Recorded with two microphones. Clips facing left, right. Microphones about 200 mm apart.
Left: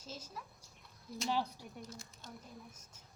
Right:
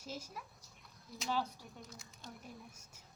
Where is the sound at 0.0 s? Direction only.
10° right (ahead or behind).